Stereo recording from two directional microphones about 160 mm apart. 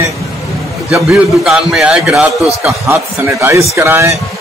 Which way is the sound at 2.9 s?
15° right (ahead or behind).